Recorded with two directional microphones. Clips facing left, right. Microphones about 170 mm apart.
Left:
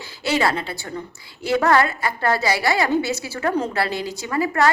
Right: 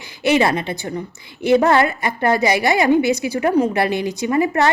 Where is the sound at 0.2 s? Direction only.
20° right (ahead or behind).